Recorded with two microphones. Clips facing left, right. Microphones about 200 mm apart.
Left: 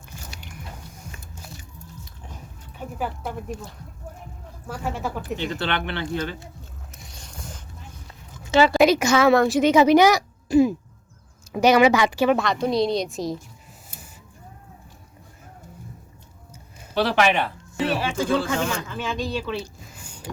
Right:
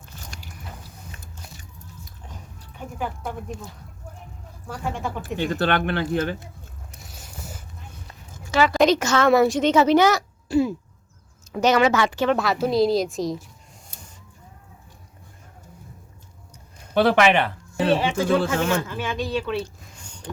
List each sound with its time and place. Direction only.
3.0 s a woman's voice: 5° left (ahead or behind)
4.7 s a woman's voice: 5° left (ahead or behind)
5.4 s speech: 50° right (ahead or behind)
7.0 s a sound: 5° right (ahead or behind)
8.4 s speech: 30° left (ahead or behind)
8.8 s speech: 10° left (ahead or behind)
9.3 s a woman's voice: centre (ahead or behind)
9.6 s speech: 10° left (ahead or behind)
12.4 s a woman's voice: 5° right (ahead or behind)
16.9 s speech: 55° right (ahead or behind)
17.8 s speech: 25° right (ahead or behind)
18.7 s a woman's voice: 5° right (ahead or behind)
19.6 s a sound: 5° left (ahead or behind)